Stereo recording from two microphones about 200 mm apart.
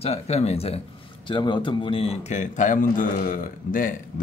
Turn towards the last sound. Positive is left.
turn(degrees=45)  # may be behind; listen again after turning